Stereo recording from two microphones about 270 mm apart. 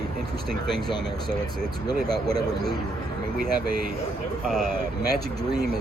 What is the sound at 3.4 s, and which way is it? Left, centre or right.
Speech, right.